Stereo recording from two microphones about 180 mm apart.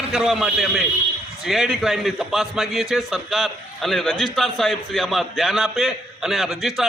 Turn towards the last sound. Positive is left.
turn(degrees=0)  # may be behind; listen again after turning